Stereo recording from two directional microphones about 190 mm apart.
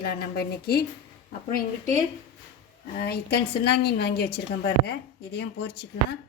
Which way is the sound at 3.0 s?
55° left (ahead or behind).